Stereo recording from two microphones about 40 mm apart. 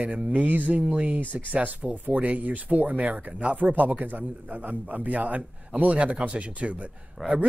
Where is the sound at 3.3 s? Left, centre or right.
Right.